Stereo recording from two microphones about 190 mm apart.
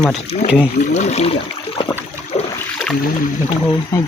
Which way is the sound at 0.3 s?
35° left (ahead or behind).